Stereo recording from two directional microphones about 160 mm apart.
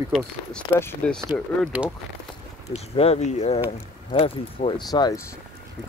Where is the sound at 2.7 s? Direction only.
40° left (ahead or behind).